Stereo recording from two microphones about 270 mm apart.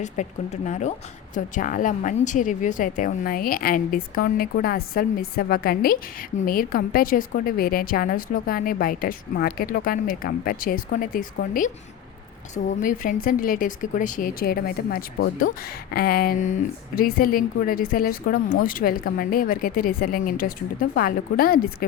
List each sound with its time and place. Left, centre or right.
0.0 s speech: left